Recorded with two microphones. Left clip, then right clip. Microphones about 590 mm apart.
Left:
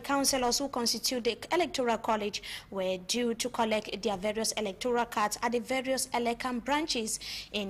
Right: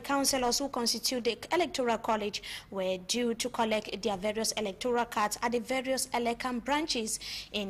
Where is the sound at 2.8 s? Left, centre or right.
Centre.